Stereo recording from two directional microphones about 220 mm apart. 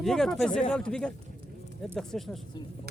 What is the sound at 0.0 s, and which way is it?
Speech, centre (ahead or behind).